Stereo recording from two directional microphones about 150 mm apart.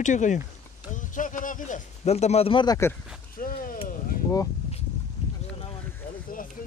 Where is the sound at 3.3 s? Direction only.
70° left (ahead or behind).